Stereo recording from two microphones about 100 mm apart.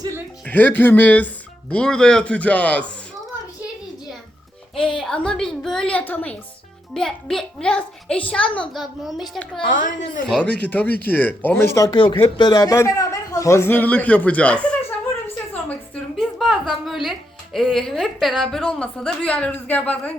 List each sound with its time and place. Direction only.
0.4 s a child's voice: 15° left (ahead or behind)
4.9 s a child's voice: 5° left (ahead or behind)
6.9 s a child's voice: 5° left (ahead or behind)
9.0 s speech: centre (ahead or behind)
10.2 s a child's voice: 10° left (ahead or behind)
11.9 s speech: 55° left (ahead or behind)
12.4 s a man's voice: 40° left (ahead or behind); by 14.8 s 10° left (ahead or behind)
16.1 s a child's voice: centre (ahead or behind)